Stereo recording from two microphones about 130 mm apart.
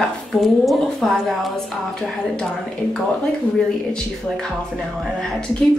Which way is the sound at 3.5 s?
5° left (ahead or behind).